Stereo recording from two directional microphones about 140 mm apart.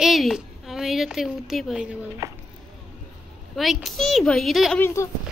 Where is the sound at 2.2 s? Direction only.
20° right (ahead or behind).